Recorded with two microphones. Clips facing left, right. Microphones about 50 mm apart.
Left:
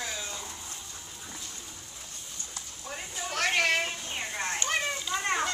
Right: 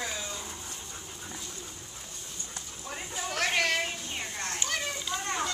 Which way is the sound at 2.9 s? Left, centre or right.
Centre.